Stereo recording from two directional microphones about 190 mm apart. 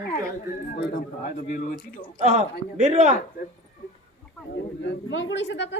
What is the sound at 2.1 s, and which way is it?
Speech, 35° right (ahead or behind).